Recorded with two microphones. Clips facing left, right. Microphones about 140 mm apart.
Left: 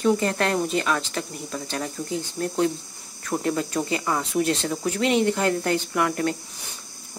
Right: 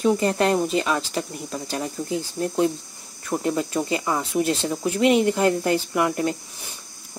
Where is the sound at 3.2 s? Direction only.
5° right (ahead or behind).